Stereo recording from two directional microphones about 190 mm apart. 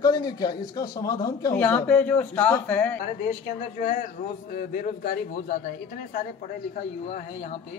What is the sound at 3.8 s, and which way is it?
Speech, 45° left (ahead or behind).